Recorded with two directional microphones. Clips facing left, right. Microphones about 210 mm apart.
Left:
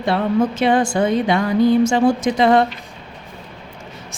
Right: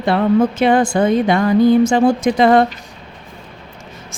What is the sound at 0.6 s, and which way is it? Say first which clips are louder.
A woman's voice: right 3 dB; 55° right (ahead or behind).